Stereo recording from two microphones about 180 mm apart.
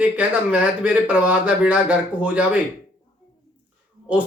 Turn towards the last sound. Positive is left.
turn(degrees=-10)  # may be behind; listen again after turning